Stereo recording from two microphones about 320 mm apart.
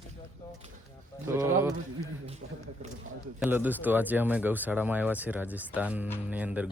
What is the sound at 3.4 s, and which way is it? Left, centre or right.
Speech, centre.